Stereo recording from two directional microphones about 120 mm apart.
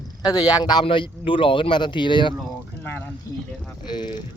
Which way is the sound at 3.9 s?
40° left (ahead or behind).